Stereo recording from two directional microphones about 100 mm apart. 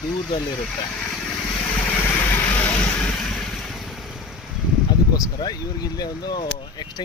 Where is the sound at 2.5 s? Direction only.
15° left (ahead or behind).